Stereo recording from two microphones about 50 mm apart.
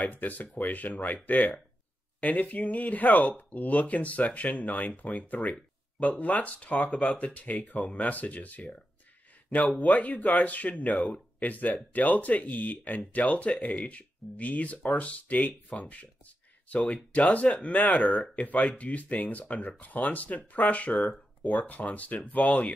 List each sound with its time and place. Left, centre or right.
0.0 s speech: left